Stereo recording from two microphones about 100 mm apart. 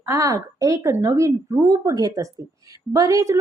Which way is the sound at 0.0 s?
30° right (ahead or behind).